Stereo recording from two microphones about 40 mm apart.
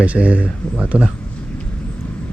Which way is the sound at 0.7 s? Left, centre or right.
Right.